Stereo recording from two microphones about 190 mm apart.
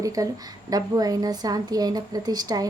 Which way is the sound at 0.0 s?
20° right (ahead or behind).